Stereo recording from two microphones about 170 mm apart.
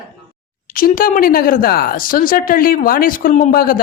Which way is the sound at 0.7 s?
55° left (ahead or behind).